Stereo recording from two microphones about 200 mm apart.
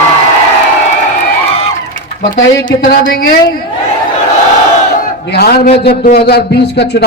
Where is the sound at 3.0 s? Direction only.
50° left (ahead or behind).